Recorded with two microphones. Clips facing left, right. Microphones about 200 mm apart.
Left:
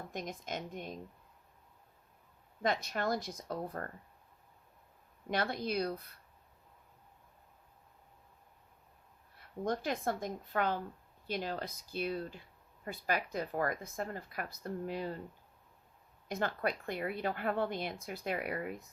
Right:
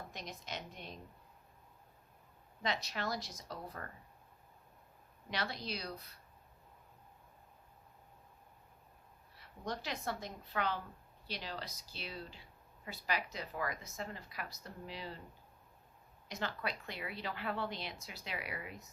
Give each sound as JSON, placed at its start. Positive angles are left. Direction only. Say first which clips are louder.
{"t": 0.1, "sound": "speech", "louder": "left 6 dB", "side_deg": 50}
{"t": 2.6, "sound": "speech", "louder": "left 5 dB", "side_deg": 50}
{"t": 5.3, "sound": "speech", "louder": "left 7 dB", "side_deg": 50}
{"t": 9.4, "sound": "speech", "louder": "left 7 dB", "side_deg": 50}
{"t": 16.3, "sound": "speech", "louder": "left 6 dB", "side_deg": 50}